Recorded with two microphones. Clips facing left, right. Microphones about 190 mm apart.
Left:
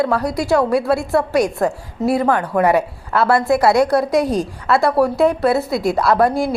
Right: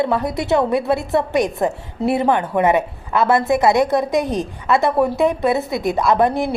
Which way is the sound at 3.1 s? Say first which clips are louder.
Left 1 dB; 20° right (ahead or behind).